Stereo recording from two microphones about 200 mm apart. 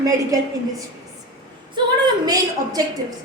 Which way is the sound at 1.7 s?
20° right (ahead or behind).